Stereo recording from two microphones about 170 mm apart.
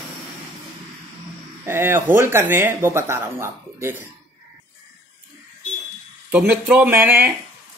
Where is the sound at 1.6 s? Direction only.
15° right (ahead or behind).